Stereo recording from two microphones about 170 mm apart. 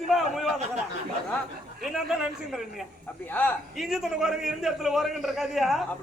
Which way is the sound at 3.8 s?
Centre (ahead or behind).